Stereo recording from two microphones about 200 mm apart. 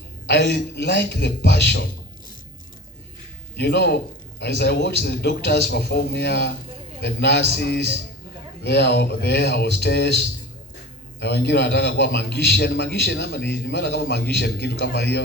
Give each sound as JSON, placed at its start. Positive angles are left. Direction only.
{"t": 0.3, "sound": "a man's voice", "side_deg": 60}
{"t": 3.5, "sound": "a man's voice", "side_deg": 60}